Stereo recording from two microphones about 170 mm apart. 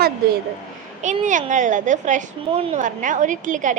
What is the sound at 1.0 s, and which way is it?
A woman's voice, 45° right (ahead or behind).